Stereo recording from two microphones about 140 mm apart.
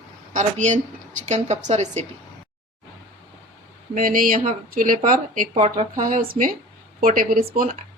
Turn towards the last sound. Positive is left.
turn(degrees=-75)  # may be behind; listen again after turning